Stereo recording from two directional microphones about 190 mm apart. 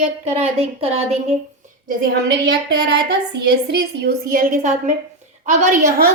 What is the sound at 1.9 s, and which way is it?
A woman's voice, 55° right (ahead or behind).